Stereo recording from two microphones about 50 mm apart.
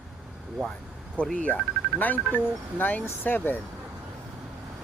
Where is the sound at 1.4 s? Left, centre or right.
Left.